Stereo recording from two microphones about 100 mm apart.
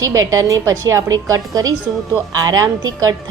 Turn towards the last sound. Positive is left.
turn(degrees=-35)  # may be behind; listen again after turning